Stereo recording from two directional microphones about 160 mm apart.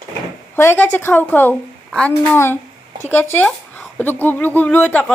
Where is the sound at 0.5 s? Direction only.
15° left (ahead or behind).